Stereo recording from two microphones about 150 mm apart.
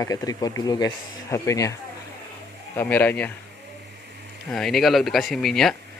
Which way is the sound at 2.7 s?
10° left (ahead or behind).